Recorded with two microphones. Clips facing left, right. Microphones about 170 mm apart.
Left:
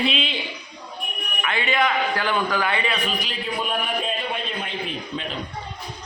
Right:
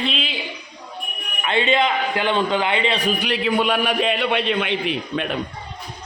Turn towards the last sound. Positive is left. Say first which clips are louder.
# right 6 dB
turn(degrees=-70)  # may be behind; listen again after turning